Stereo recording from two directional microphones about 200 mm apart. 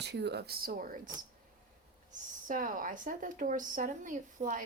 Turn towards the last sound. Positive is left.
turn(degrees=-40)  # may be behind; listen again after turning